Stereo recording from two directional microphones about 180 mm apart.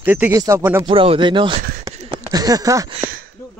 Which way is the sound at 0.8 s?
30° right (ahead or behind).